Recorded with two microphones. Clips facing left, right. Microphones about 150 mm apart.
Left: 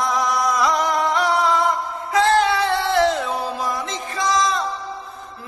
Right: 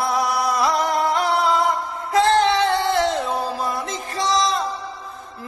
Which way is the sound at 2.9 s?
Centre (ahead or behind).